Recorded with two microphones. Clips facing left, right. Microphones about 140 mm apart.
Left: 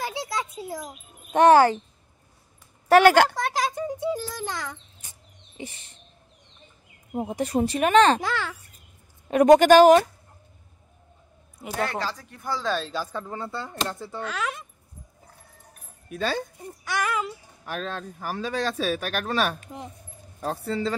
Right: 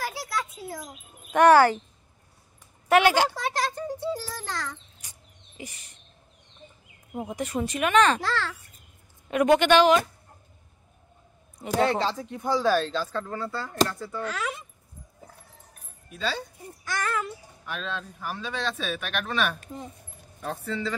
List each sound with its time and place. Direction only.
0.0 s a sound: 20° left (ahead or behind)
1.3 s speech: 20° left (ahead or behind)
2.9 s speech: 45° left (ahead or behind)
3.6 s a child's voice: 15° left (ahead or behind)
5.6 s speech: 30° left (ahead or behind)
7.1 s speech: 30° left (ahead or behind)
8.2 s a child's voice: 15° left (ahead or behind)
9.3 s speech: 40° left (ahead or behind)
11.8 s speech: 25° right (ahead or behind)
12.9 s speech: 15° left (ahead or behind)
14.2 s speech: centre (ahead or behind)
16.1 s speech: 50° left (ahead or behind)
17.0 s a child's voice: 15° left (ahead or behind)
17.6 s speech: 45° left (ahead or behind)